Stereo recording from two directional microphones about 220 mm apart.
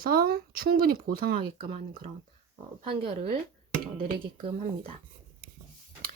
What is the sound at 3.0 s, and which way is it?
Speech, 25° right (ahead or behind).